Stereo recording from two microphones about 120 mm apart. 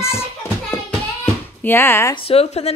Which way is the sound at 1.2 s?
15° left (ahead or behind).